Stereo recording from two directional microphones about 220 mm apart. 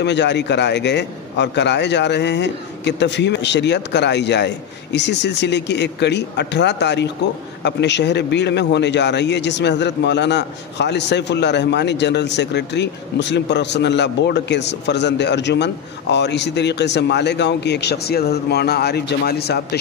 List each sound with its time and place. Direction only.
0.0 s a man's voice: 50° left (ahead or behind)